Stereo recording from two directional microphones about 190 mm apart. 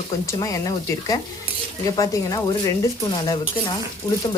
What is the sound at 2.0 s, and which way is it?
Speech, 20° left (ahead or behind).